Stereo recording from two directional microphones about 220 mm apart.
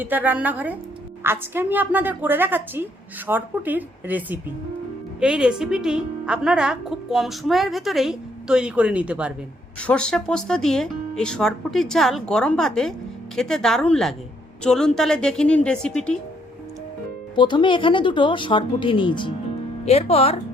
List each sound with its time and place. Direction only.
0.0 s a woman's voice: 10° right (ahead or behind)
17.3 s speech: 20° left (ahead or behind)